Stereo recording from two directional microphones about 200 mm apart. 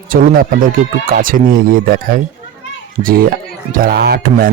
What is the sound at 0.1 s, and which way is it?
Speech, 45° right (ahead or behind).